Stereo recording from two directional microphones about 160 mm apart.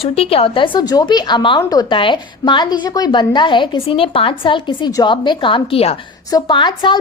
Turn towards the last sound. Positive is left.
turn(degrees=30)  # may be behind; listen again after turning